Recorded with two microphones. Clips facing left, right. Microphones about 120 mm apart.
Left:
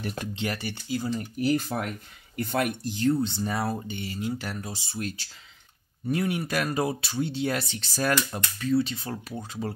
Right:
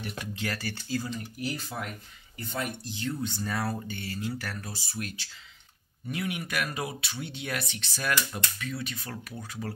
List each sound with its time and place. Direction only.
0.0 s speech: 40° left (ahead or behind)
0.4 s speech: 20° left (ahead or behind)
1.4 s speech: 60° left (ahead or behind)
3.1 s speech: 30° left (ahead or behind)
6.0 s speech: 35° left (ahead or behind)